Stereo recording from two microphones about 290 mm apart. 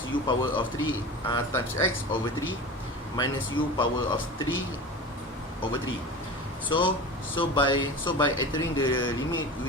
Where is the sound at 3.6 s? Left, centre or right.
Centre.